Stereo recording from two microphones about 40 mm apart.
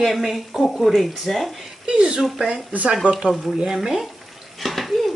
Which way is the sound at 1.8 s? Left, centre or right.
Right.